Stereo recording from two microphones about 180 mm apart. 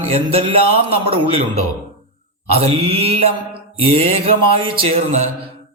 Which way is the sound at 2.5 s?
35° right (ahead or behind).